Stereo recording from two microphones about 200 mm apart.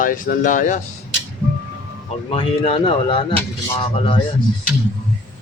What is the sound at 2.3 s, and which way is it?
Speech, 30° left (ahead or behind).